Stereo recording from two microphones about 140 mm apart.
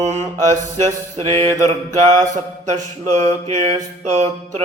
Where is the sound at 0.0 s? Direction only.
55° right (ahead or behind).